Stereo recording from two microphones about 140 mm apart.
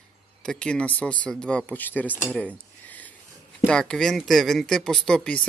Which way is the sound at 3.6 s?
5° left (ahead or behind).